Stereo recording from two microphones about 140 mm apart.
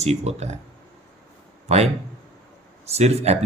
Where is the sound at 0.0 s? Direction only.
50° right (ahead or behind).